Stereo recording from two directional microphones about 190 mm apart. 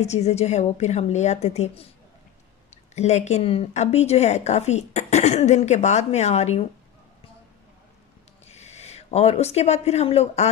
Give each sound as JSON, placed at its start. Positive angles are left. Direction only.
{"t": 0.0, "sound": "speech", "side_deg": 35}
{"t": 8.5, "sound": "speech", "side_deg": 35}